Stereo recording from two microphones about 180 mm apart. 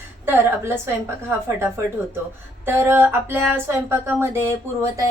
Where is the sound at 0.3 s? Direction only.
10° right (ahead or behind).